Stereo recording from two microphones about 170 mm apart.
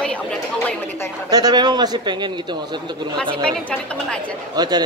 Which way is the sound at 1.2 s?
25° right (ahead or behind).